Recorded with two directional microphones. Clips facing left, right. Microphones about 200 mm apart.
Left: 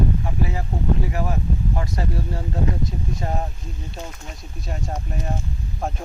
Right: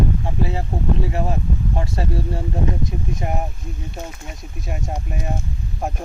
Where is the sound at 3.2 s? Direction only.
15° right (ahead or behind).